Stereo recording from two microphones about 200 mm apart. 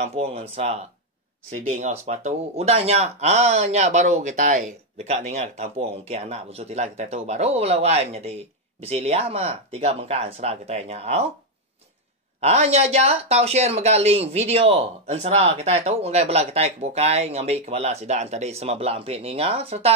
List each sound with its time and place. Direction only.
0.0 s speech: 30° right (ahead or behind)
1.8 s speech: 35° right (ahead or behind)
12.4 s speech: 30° right (ahead or behind)